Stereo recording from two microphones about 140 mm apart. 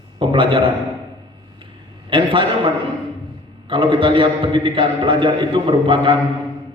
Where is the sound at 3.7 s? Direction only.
35° right (ahead or behind).